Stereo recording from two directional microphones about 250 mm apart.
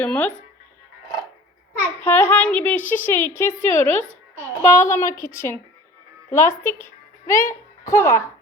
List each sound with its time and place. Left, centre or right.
0.0 s speech: centre
2.0 s a woman's voice: centre
6.3 s a woman's voice: centre